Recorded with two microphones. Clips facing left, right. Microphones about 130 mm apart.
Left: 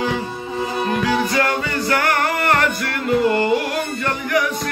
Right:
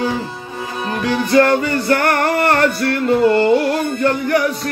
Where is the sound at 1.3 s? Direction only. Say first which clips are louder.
Right 7 dB; 35° right (ahead or behind).